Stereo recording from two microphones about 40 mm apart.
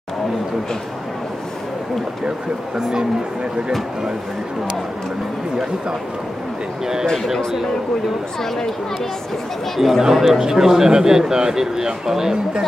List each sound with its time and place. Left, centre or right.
2.8 s speech: centre
9.8 s speech: centre